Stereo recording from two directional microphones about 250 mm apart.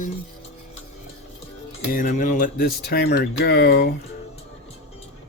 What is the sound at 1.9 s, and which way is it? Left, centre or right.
Speech, left.